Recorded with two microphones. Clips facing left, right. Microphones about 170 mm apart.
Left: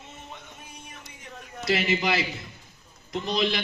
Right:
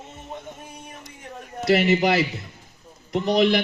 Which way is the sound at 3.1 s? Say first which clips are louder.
Right 7 dB; 65° right (ahead or behind).